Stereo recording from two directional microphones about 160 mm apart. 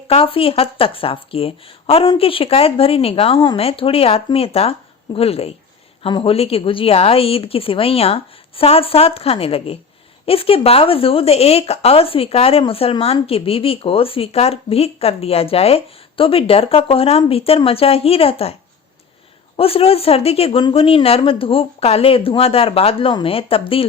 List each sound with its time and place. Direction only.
0.1 s speech: 35° left (ahead or behind)
19.5 s speech: 35° left (ahead or behind)